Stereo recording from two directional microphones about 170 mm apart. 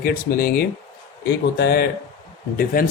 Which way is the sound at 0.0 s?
60° left (ahead or behind).